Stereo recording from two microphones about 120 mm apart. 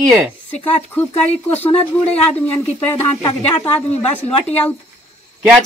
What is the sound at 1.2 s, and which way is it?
Speech, 60° left (ahead or behind).